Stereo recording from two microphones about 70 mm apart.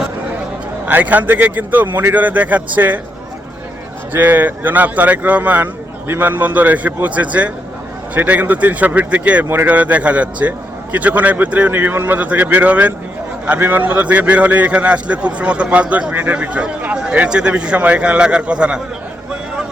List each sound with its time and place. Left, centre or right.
0.9 s a man's voice: right
4.1 s a man's voice: right